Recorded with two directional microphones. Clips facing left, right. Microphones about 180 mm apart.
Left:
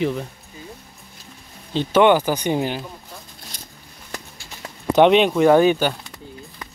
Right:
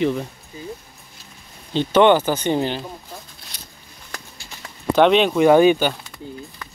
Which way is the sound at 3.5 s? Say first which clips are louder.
Left 1 dB; 50° left (ahead or behind).